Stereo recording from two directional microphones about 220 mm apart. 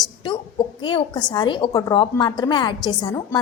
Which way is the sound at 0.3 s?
20° left (ahead or behind).